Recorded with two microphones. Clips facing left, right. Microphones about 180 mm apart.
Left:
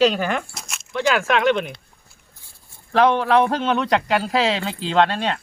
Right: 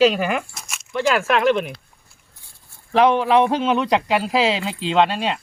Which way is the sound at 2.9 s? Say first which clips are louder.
Right 1 dB; 5° right (ahead or behind).